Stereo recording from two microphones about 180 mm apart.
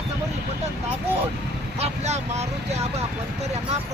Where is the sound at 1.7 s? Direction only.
35° right (ahead or behind).